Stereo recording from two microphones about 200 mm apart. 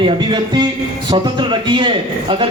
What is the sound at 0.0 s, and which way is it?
A man's voice, 25° right (ahead or behind).